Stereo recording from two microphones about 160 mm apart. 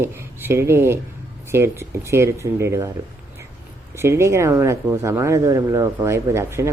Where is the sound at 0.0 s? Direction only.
15° right (ahead or behind).